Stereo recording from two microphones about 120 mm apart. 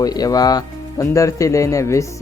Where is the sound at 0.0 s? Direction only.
30° left (ahead or behind).